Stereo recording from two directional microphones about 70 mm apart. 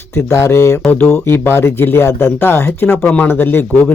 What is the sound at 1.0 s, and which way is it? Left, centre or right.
Speech, left.